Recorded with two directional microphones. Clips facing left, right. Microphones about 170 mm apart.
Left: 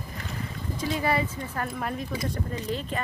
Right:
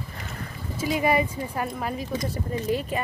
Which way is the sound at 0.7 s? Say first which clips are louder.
Right 4 dB; 15° right (ahead or behind).